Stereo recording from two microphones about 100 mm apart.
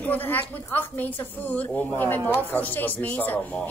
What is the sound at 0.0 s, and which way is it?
Speech, 20° left (ahead or behind).